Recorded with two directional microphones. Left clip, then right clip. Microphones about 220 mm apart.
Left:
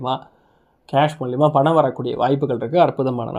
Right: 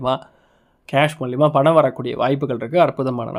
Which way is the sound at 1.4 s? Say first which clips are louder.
Right 1 dB; 15° right (ahead or behind).